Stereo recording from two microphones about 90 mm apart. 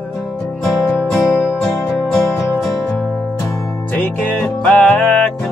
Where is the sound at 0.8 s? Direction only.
15° left (ahead or behind).